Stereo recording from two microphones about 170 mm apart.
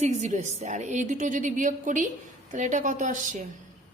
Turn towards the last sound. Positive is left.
turn(degrees=-50)  # may be behind; listen again after turning